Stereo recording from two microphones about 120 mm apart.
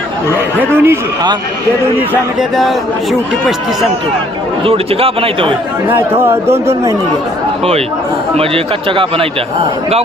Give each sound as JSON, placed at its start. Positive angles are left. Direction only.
{"t": 0.6, "sound": "speech", "side_deg": -20}
{"t": 2.4, "sound": "speech", "side_deg": 0}
{"t": 4.6, "sound": "speech", "side_deg": -50}
{"t": 5.9, "sound": "speech", "side_deg": -20}
{"t": 8.4, "sound": "speech", "side_deg": -50}